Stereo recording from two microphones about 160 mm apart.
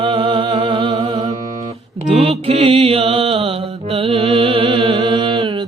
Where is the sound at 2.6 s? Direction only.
35° right (ahead or behind).